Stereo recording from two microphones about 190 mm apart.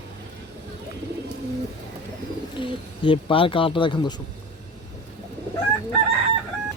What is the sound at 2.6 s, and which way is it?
Speech, 25° left (ahead or behind).